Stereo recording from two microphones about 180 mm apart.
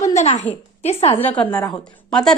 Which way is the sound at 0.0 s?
40° left (ahead or behind).